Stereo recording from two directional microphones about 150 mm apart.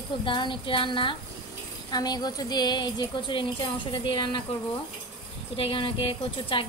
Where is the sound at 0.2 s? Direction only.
35° left (ahead or behind).